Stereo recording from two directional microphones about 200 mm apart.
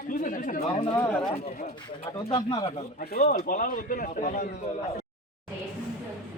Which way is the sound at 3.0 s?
45° left (ahead or behind).